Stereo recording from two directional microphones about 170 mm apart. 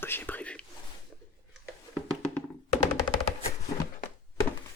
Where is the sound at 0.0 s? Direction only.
10° left (ahead or behind).